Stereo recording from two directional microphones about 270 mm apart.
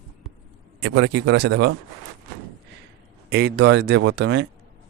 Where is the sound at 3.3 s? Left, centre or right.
Right.